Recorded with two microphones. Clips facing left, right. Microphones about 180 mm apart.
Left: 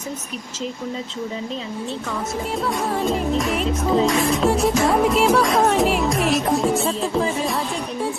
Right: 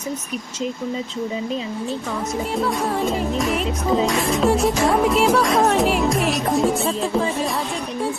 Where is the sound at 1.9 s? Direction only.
Centre (ahead or behind).